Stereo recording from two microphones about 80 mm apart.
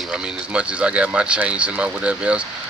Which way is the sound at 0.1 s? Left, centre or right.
Centre.